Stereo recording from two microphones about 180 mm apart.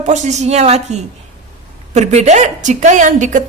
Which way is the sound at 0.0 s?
40° right (ahead or behind).